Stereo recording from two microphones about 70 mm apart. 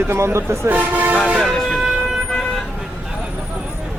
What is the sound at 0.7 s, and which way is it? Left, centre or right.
Speech, right.